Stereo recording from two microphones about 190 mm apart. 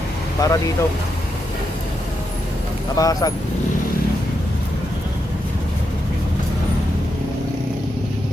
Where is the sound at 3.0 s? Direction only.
20° left (ahead or behind).